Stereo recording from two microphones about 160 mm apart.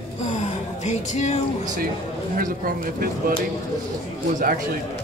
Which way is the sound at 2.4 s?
65° right (ahead or behind).